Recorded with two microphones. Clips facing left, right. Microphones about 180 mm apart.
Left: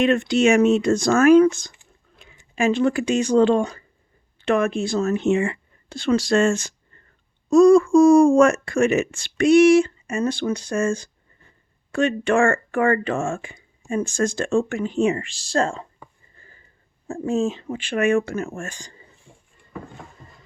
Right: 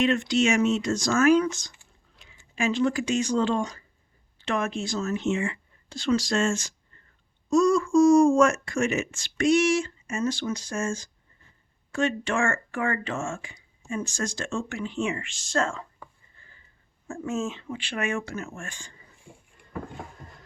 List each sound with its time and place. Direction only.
0.0 s speech: 55° left (ahead or behind)
2.2 s a sound: 55° left (ahead or behind)
2.6 s speech: 55° left (ahead or behind); by 15.9 s 35° left (ahead or behind)
16.4 s sniff: 45° left (ahead or behind)
17.1 s speech: 35° left (ahead or behind)